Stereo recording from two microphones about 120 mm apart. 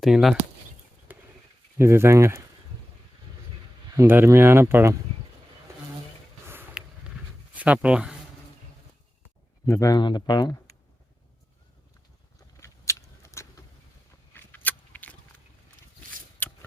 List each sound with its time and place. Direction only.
0.0 s speech: centre (ahead or behind)
1.1 s a sound: 15° right (ahead or behind)
1.8 s speech: 20° right (ahead or behind)
3.9 s speech: 20° right (ahead or behind)
6.8 s a sound: 5° right (ahead or behind)
7.5 s speech: 10° right (ahead or behind)
9.6 s speech: 25° left (ahead or behind)
12.5 s a sound: 25° left (ahead or behind)
16.4 s shuffling cards: 15° left (ahead or behind)